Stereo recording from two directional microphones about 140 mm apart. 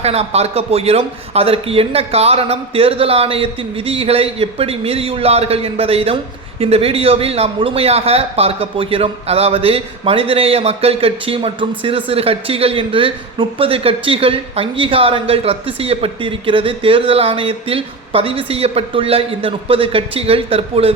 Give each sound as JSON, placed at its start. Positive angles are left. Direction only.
{"t": 0.0, "sound": "a man's voice", "side_deg": -50}